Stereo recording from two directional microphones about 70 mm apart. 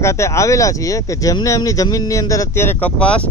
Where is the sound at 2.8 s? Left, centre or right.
Centre.